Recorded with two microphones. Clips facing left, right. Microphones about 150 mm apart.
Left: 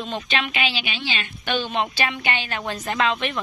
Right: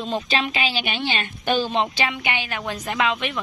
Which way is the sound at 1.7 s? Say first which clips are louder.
Right 2 dB; 25° right (ahead or behind).